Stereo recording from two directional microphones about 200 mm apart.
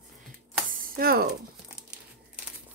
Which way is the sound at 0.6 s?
45° right (ahead or behind).